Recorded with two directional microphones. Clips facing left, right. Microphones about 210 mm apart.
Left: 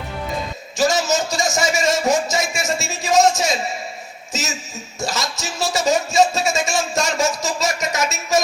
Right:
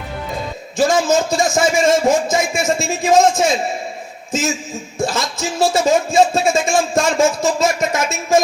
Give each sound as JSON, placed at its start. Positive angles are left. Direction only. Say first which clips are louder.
{"t": 0.8, "sound": "a man's voice", "louder": "right 4 dB", "side_deg": -55}